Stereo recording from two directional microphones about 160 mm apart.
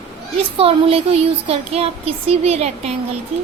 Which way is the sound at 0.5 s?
35° right (ahead or behind).